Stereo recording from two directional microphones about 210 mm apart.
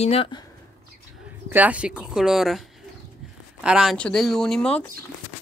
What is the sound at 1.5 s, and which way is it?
Speech, 5° right (ahead or behind).